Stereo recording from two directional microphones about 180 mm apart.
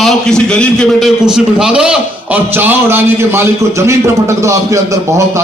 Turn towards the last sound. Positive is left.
turn(degrees=-15)  # may be behind; listen again after turning